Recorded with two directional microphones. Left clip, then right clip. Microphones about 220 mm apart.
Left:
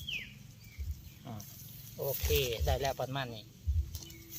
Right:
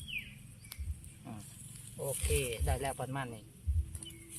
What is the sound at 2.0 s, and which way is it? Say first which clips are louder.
Speech: left 3 dB; 30° left (ahead or behind).